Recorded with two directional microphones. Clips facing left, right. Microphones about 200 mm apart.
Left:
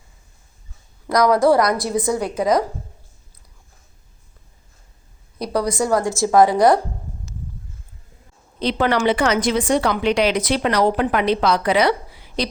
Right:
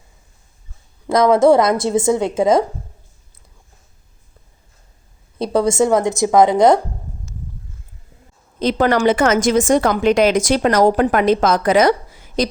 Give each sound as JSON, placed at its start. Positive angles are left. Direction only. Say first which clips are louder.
{"t": 1.0, "sound": "a woman's voice", "louder": "right 3 dB", "side_deg": -25}
{"t": 5.4, "sound": "a woman's voice", "louder": "right 5 dB", "side_deg": -25}
{"t": 8.5, "sound": "a woman's voice", "louder": "right 3 dB", "side_deg": -45}